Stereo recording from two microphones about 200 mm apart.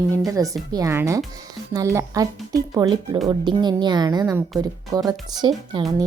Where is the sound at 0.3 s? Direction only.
15° right (ahead or behind).